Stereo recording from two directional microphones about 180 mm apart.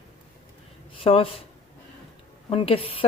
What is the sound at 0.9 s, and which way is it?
Speech, 30° left (ahead or behind).